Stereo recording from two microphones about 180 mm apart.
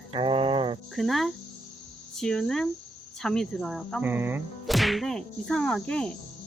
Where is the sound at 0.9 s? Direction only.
Centre (ahead or behind).